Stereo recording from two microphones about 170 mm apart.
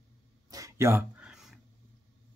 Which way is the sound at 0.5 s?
20° right (ahead or behind).